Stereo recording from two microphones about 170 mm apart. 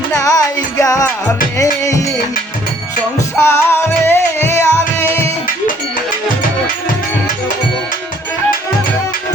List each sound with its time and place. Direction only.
0.1 s music: 20° left (ahead or behind)
3.3 s music: 15° left (ahead or behind)